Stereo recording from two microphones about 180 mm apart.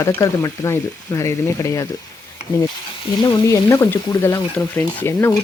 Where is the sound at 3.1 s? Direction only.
20° left (ahead or behind).